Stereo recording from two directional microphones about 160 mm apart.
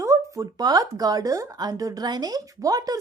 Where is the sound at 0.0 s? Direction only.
20° right (ahead or behind).